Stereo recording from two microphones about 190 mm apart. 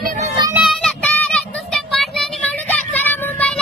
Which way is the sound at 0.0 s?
40° right (ahead or behind).